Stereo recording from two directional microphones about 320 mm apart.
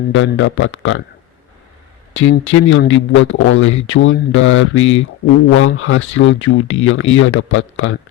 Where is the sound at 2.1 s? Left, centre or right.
Left.